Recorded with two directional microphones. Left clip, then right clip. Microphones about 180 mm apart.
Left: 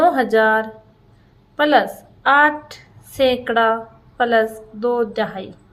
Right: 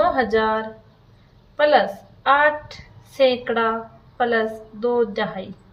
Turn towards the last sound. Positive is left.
turn(degrees=30)  # may be behind; listen again after turning